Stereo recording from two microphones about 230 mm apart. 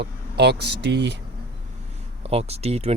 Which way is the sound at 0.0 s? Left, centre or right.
Right.